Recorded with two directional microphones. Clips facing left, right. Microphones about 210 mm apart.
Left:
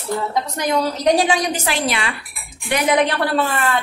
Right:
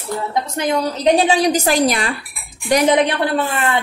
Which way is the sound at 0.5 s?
20° right (ahead or behind).